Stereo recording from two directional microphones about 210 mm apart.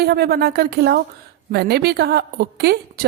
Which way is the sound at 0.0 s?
50° right (ahead or behind).